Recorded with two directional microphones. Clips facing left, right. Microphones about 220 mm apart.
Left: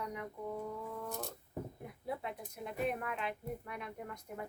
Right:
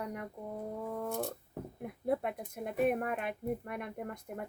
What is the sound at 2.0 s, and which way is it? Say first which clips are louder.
Speech: right 8 dB; 55° right (ahead or behind).